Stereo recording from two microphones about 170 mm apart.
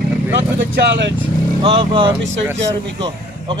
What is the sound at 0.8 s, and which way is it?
Speech, 90° right.